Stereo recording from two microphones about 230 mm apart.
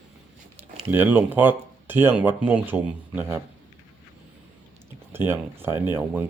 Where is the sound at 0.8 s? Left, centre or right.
Centre.